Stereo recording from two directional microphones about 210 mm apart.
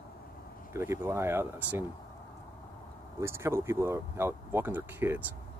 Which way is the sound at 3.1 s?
10° right (ahead or behind).